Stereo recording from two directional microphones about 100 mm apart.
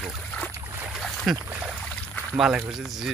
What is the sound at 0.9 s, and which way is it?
Boat, centre (ahead or behind).